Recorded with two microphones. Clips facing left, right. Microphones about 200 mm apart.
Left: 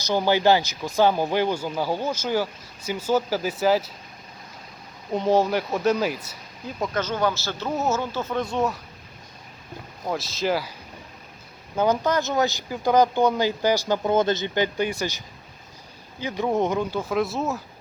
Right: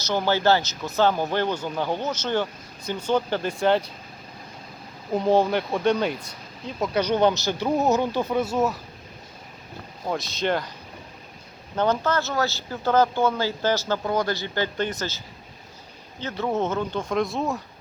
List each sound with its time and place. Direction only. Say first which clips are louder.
0.0 s speech: left 2 dB; 15° left (ahead or behind)
5.1 s speech: even; centre (ahead or behind)
6.9 s speech: right 5 dB; 15° right (ahead or behind)
10.1 s speech: even; centre (ahead or behind)
11.8 s speech: left 1 dB; 15° left (ahead or behind)
16.2 s speech: left 2 dB; 15° left (ahead or behind)